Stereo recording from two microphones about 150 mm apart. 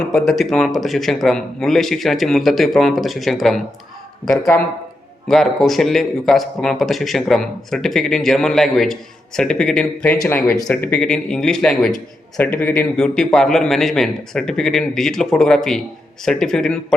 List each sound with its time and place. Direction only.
0.1 s a man's voice: centre (ahead or behind)
4.5 s speech: 15° left (ahead or behind)
5.3 s a man's voice: centre (ahead or behind)
10.2 s a man's voice: 15° left (ahead or behind)